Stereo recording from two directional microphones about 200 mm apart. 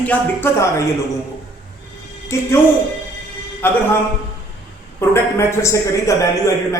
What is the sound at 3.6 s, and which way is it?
Speech, 10° left (ahead or behind).